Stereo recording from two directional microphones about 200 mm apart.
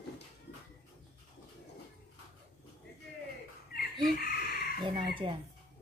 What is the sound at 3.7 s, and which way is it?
Chicken, 50° left (ahead or behind).